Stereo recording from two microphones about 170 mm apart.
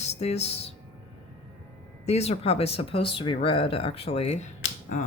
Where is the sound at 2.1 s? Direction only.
40° left (ahead or behind).